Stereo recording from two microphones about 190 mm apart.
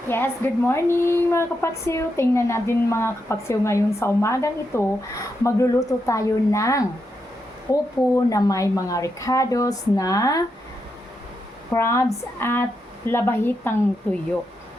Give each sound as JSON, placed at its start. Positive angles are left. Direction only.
{"t": 0.1, "sound": "a woman's voice", "side_deg": 10}
{"t": 8.1, "sound": "a woman's voice", "side_deg": 20}
{"t": 11.7, "sound": "a woman's voice", "side_deg": 15}